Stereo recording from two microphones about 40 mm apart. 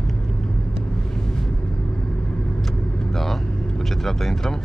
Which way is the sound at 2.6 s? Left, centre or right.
Centre.